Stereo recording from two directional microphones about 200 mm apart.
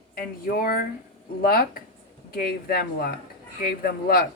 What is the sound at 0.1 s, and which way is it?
Speech, 45° left (ahead or behind).